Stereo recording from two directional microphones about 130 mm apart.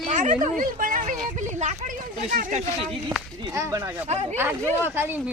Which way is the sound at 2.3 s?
75° right (ahead or behind).